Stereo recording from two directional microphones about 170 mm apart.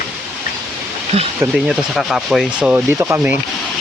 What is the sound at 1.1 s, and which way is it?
Speech, 40° right (ahead or behind).